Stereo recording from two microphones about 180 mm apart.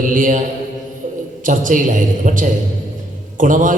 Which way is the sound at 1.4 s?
45° right (ahead or behind).